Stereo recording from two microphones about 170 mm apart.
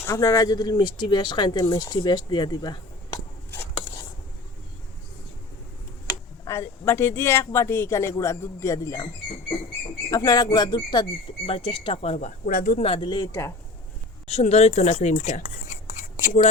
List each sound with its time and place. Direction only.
0.0 s speech: 20° left (ahead or behind)
6.4 s speech: 15° left (ahead or behind)
10.1 s speech: 25° left (ahead or behind)
12.5 s a woman's voice: 50° left (ahead or behind)
12.8 s speech: 35° left (ahead or behind)
14.3 s a woman's voice: 40° left (ahead or behind)